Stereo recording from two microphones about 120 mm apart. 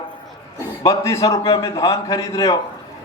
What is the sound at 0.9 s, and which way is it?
A man's voice, 25° left (ahead or behind).